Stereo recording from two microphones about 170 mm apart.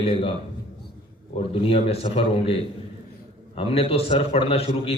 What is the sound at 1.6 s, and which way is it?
Speech, 35° left (ahead or behind).